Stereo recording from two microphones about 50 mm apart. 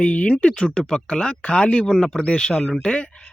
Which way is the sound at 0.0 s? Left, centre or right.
Left.